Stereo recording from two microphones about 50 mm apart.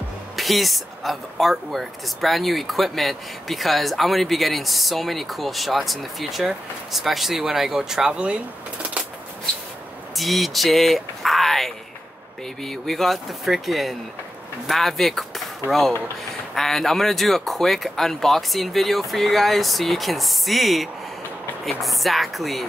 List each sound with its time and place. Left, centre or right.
0.4 s speech: centre
8.1 s speech: right
10.1 s speech: centre
16.5 s speech: centre